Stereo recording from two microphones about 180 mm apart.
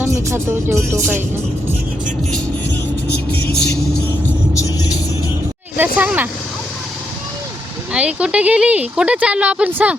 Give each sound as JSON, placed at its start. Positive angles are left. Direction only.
{"t": 0.0, "sound": "speech", "side_deg": -15}
{"t": 3.4, "sound": "speech", "side_deg": 65}
{"t": 4.5, "sound": "vehicle", "side_deg": 20}
{"t": 6.0, "sound": "speech", "side_deg": -10}
{"t": 7.9, "sound": "speech", "side_deg": -5}